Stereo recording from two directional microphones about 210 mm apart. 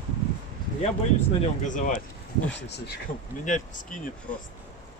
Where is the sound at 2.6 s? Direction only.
55° left (ahead or behind).